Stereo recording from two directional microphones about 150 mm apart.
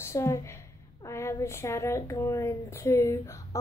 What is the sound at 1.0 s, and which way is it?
A woman's voice, 20° left (ahead or behind).